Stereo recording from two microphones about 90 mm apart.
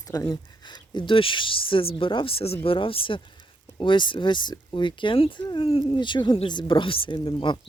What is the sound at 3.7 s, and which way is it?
Speech, 65° left (ahead or behind).